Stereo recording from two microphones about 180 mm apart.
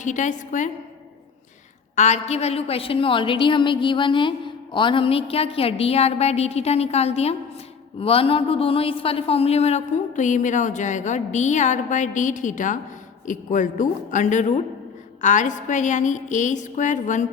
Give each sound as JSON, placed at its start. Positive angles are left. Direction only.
{"t": 0.0, "sound": "a woman's voice", "side_deg": 45}
{"t": 2.0, "sound": "a woman's voice", "side_deg": 40}